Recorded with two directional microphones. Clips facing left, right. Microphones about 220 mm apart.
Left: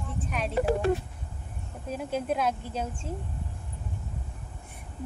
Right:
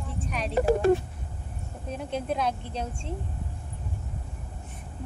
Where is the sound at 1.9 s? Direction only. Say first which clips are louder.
Left 1 dB; 5° left (ahead or behind).